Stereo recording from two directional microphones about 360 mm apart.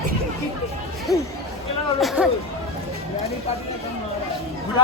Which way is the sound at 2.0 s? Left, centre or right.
Centre.